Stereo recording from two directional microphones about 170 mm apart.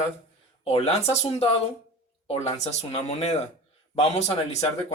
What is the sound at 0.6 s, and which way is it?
Speech, 40° left (ahead or behind).